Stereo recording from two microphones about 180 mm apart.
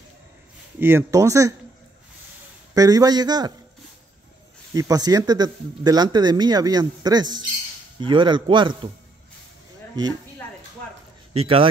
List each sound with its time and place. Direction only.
0.7 s speech: 15° right (ahead or behind)
2.7 s speech: 20° right (ahead or behind)
4.7 s speech: 20° right (ahead or behind)
11.3 s speech: 30° right (ahead or behind)